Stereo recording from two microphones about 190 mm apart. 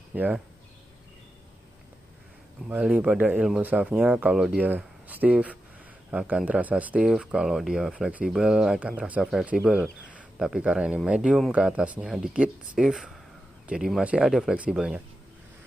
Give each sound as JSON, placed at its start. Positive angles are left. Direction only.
{"t": 0.1, "sound": "speech", "side_deg": -10}
{"t": 2.7, "sound": "speech", "side_deg": -5}